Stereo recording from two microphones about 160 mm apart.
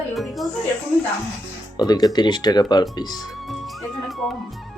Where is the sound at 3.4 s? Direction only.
Centre (ahead or behind).